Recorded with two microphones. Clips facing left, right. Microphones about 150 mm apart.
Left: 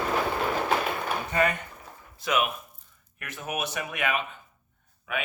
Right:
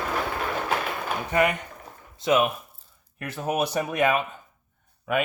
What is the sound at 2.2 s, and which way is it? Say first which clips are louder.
Speech: right 5 dB; 25° right (ahead or behind).